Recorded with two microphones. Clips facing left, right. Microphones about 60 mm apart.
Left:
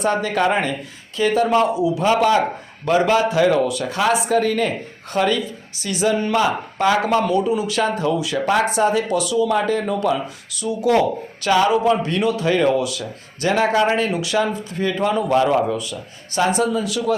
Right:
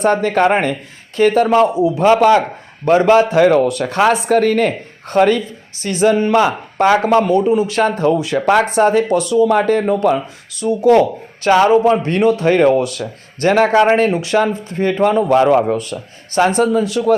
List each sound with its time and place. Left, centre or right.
0.0 s a man's voice: right
7.2 s speech: right
7.4 s a man's voice: right